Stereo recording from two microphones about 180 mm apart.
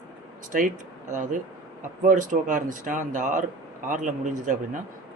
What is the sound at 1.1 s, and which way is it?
Speech, 45° right (ahead or behind).